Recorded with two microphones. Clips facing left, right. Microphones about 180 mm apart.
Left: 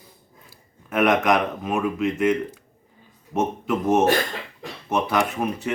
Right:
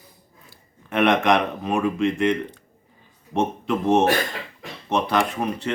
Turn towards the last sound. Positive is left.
turn(degrees=5)  # may be behind; listen again after turning